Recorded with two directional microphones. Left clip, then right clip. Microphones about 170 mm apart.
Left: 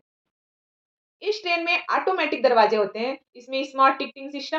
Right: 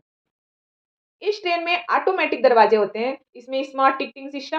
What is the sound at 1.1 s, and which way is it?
Speech, 40° right (ahead or behind).